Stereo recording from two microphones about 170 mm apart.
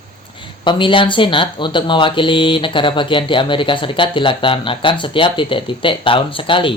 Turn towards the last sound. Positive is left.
turn(degrees=30)  # may be behind; listen again after turning